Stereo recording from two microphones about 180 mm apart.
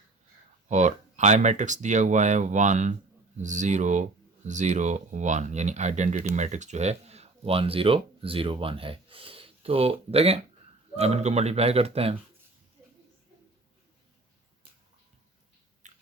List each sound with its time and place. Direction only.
0.7 s speech: 40° right (ahead or behind)
15.8 s biting: 40° right (ahead or behind)